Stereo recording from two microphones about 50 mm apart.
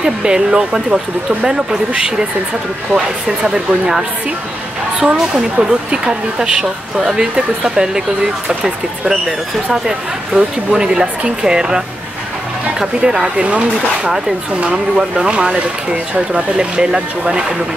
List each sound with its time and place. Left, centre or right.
0.0 s speech: centre
3.3 s speech: centre
5.0 s speech: centre